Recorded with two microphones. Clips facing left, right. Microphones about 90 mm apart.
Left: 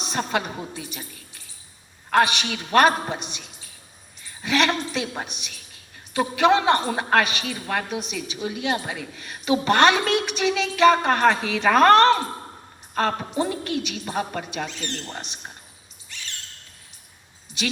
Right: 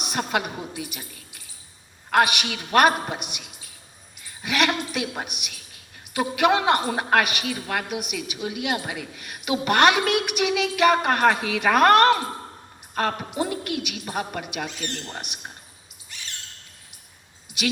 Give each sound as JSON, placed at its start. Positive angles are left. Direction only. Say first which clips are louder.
{"t": 0.0, "sound": "a woman's voice", "louder": "even", "side_deg": 30}